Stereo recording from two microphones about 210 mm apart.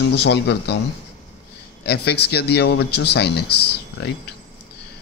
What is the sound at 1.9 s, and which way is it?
A man's voice, 50° left (ahead or behind).